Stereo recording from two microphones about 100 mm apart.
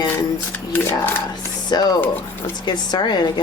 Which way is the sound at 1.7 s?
45° left (ahead or behind).